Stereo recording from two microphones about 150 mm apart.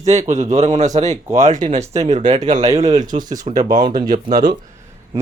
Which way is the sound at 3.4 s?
55° right (ahead or behind).